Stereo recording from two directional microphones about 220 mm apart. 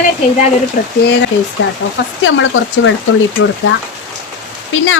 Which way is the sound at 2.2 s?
60° left (ahead or behind).